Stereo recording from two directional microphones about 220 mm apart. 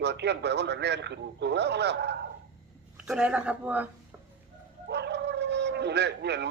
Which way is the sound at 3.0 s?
5° right (ahead or behind).